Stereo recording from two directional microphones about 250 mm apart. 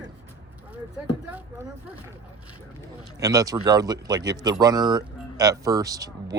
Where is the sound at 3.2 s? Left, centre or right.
Centre.